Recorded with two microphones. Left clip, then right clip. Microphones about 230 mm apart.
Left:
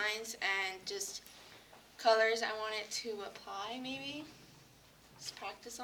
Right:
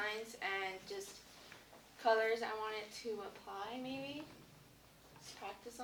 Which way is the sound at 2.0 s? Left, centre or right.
Left.